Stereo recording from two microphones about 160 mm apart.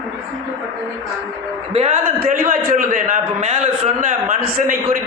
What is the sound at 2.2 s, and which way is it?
A man's voice, 60° right (ahead or behind).